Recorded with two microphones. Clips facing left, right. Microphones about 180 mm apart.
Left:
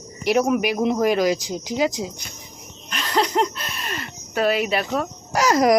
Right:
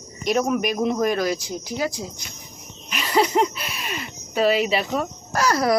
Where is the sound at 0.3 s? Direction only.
15° left (ahead or behind).